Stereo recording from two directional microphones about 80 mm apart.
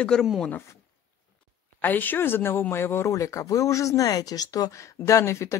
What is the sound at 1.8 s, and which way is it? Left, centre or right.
Speech, left.